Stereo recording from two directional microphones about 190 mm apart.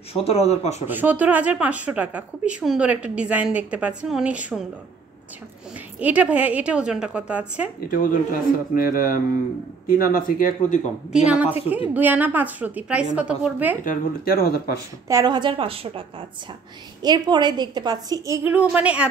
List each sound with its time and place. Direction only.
0.1 s speech: 30° left (ahead or behind)
0.8 s speech: 10° right (ahead or behind)
5.9 s speech: 5° right (ahead or behind)
7.9 s speech: 45° left (ahead or behind)
11.1 s speech: 5° right (ahead or behind)
13.8 s speech: 55° left (ahead or behind)
15.0 s a woman's voice: 20° right (ahead or behind)
17.0 s speech: 20° right (ahead or behind); by 19.0 s 5° right (ahead or behind)